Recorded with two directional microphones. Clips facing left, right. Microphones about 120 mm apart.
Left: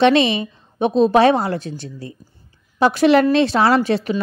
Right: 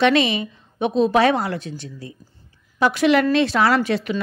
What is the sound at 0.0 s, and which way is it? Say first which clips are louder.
A woman's voice: left 3 dB; 25° left (ahead or behind).